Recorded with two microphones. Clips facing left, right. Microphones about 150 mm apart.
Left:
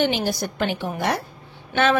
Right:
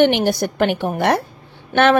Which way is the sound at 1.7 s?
45° right (ahead or behind).